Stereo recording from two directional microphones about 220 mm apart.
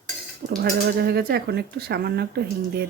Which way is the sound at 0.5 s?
45° right (ahead or behind).